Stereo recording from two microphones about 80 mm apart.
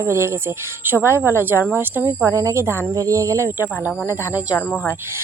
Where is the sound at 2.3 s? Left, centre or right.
Right.